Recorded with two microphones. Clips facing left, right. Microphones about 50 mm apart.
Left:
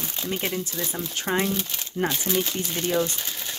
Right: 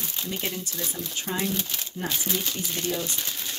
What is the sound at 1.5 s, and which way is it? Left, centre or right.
Speech, centre.